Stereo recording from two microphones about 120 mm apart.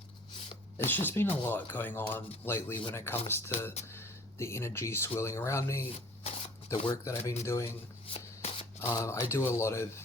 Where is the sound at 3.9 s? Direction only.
20° left (ahead or behind).